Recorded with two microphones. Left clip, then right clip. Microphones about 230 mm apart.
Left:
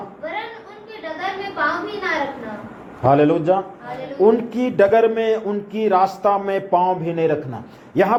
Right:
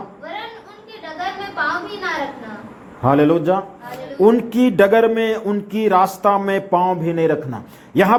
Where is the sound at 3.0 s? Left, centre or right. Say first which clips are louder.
Even; right.